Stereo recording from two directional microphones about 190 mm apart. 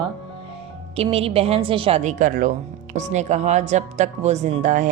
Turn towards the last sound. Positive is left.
turn(degrees=-40)  # may be behind; listen again after turning